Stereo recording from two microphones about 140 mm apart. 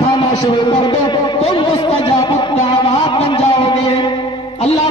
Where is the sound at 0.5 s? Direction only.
35° left (ahead or behind).